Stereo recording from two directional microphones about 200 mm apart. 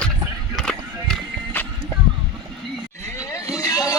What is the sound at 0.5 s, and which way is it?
Music, centre (ahead or behind).